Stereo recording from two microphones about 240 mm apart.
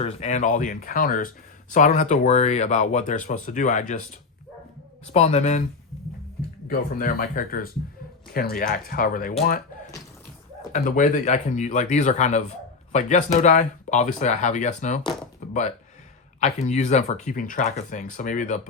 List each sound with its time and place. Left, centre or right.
0.0 s speech: left
5.0 s speech: left
6.7 s speech: left
15.4 s a sound: left
16.4 s speech: left